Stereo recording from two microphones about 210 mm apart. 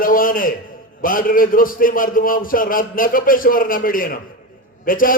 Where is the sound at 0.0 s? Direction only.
40° left (ahead or behind).